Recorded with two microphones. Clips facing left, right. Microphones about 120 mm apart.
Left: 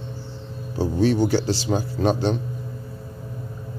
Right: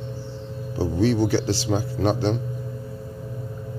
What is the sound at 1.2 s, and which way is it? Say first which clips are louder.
Speech: left 1 dB; 40° left (ahead or behind).